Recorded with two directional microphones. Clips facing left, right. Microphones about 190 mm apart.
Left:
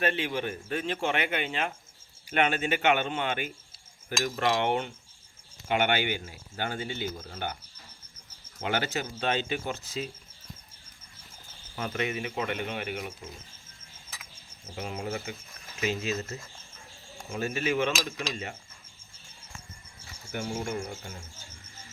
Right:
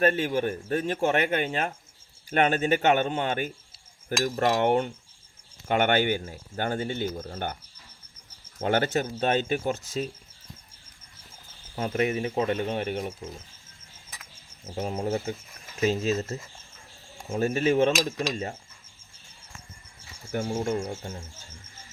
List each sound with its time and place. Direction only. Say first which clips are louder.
0.0 s speech: right 5 dB; 45° right (ahead or behind)
8.6 s speech: right 6 dB; 50° right (ahead or behind)
11.8 s speech: right 6 dB; 30° right (ahead or behind)
14.8 s speech: right 6 dB; 30° right (ahead or behind)
20.3 s speech: right 5 dB; 35° right (ahead or behind)
20.7 s speech: right 5 dB; 25° right (ahead or behind)